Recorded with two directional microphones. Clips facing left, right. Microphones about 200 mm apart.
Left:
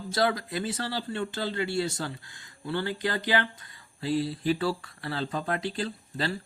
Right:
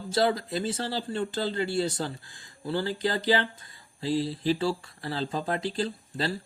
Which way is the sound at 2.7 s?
30° right (ahead or behind).